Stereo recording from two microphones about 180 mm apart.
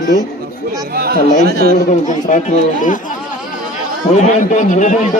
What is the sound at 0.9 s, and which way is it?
Chatter, 55° right (ahead or behind).